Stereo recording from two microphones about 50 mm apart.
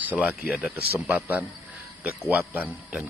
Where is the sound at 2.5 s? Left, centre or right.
Right.